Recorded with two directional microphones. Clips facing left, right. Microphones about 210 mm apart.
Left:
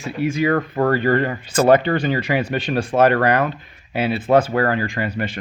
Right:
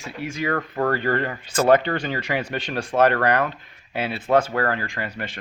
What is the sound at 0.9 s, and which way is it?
Speech, 10° left (ahead or behind).